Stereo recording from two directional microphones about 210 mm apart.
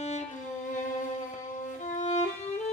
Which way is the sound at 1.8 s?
35° left (ahead or behind).